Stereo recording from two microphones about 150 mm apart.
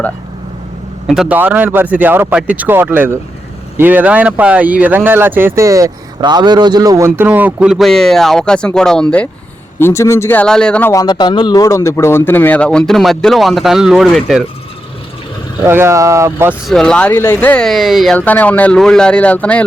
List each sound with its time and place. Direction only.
1.0 s speech: 5° right (ahead or behind)
10.9 s speech: 30° left (ahead or behind); by 14.4 s centre (ahead or behind)
15.6 s speech: 15° right (ahead or behind)
16.6 s speech: 5° left (ahead or behind)
18.2 s speech: 10° left (ahead or behind)